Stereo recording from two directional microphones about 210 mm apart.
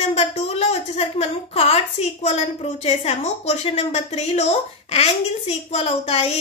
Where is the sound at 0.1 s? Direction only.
30° left (ahead or behind).